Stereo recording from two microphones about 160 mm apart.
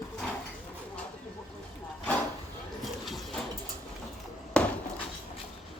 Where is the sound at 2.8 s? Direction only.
Centre (ahead or behind).